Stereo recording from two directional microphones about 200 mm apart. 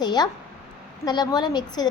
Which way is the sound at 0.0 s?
20° left (ahead or behind).